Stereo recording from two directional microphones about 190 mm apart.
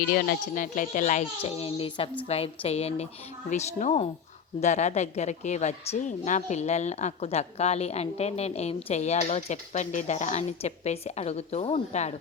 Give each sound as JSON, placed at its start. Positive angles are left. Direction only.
{"t": 0.0, "sound": "a woman's voice", "side_deg": 55}